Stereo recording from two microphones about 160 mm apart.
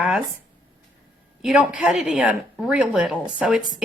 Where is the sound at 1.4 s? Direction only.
5° right (ahead or behind).